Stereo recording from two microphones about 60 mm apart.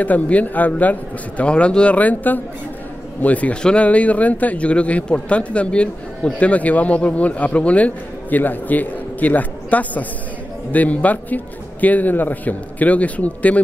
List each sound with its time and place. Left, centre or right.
0.0 s a man's voice: left